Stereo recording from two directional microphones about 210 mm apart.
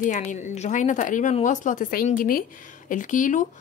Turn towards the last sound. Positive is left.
turn(degrees=35)  # may be behind; listen again after turning